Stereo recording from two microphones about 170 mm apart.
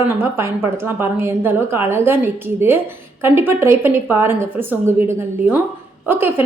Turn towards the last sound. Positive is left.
turn(degrees=-15)  # may be behind; listen again after turning